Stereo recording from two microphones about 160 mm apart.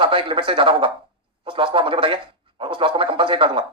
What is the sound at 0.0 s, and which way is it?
A man's voice, 35° right (ahead or behind).